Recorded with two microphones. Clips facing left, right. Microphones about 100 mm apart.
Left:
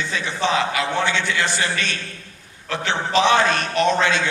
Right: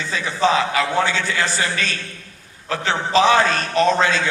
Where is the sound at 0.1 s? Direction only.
35° right (ahead or behind).